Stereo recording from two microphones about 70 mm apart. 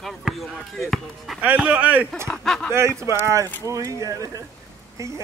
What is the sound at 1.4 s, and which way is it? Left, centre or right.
Speech, centre.